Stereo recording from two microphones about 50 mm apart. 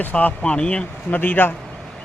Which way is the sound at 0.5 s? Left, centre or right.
Centre.